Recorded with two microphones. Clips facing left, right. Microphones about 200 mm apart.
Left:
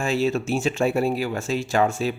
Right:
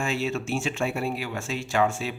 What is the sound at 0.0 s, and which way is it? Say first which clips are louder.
Speech: left 5 dB; 35° left (ahead or behind).